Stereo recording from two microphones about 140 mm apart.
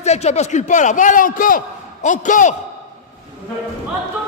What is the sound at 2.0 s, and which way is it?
Speech, 65° left (ahead or behind).